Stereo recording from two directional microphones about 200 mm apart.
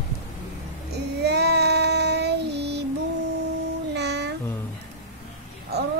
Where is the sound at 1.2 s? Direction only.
55° right (ahead or behind).